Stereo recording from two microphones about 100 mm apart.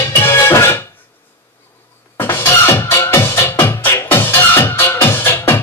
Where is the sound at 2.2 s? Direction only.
25° left (ahead or behind).